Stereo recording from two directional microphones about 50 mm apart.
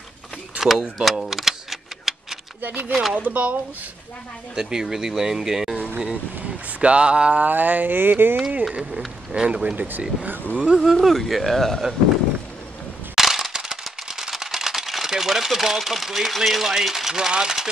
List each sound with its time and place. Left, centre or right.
0.6 s speech: centre
1.2 s typewriter: centre
2.9 s speech: centre
3.2 s speech: right
4.6 s speech: centre
6.4 s speech: right
7.4 s speech: right
8.7 s speech: right
9.8 s speech: right
10.6 s speech: centre
13.1 s typewriter: centre